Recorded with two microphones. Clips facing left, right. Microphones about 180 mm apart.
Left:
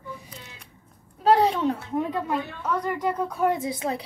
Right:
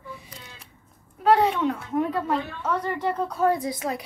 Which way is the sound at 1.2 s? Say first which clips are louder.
Even; 35° left (ahead or behind).